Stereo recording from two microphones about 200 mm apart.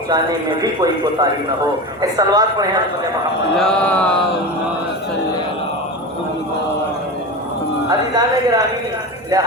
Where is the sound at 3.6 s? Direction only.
5° left (ahead or behind).